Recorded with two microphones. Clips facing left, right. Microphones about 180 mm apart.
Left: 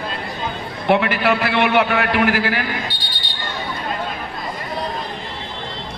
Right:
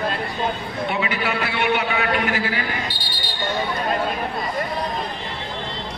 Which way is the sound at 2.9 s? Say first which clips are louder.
Right 1 dB; centre (ahead or behind).